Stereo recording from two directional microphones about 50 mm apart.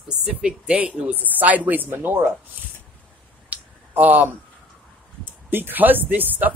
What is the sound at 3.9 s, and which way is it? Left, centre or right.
Speech, right.